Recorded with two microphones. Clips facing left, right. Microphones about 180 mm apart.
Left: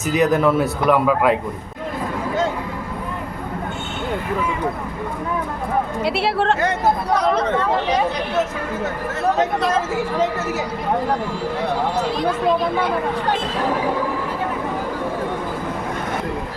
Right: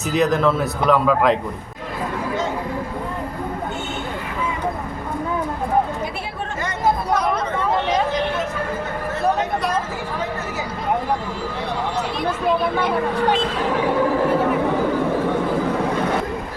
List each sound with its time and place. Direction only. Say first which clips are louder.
0.0 s speech: left 1 dB; 10° left (ahead or behind)
6.0 s speech: left 8 dB; 75° left (ahead or behind)